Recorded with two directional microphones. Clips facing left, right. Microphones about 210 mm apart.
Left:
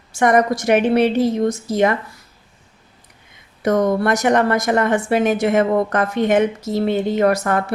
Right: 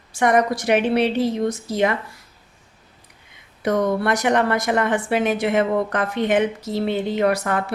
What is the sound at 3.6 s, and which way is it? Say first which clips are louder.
Speech: left 3 dB; 45° left (ahead or behind).